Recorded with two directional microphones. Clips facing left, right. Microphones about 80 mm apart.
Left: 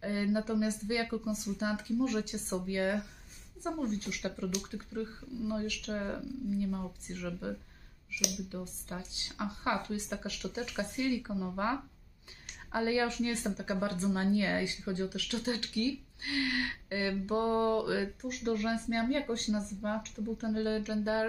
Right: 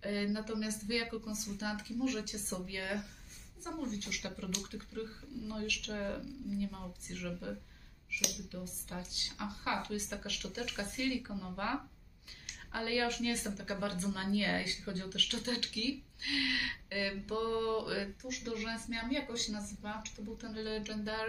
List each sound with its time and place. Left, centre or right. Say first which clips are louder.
0.0 s speech: left 4 dB; left
12.7 s speech: left 4 dB; left